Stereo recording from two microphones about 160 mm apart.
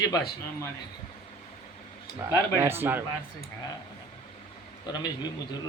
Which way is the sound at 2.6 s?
15° right (ahead or behind).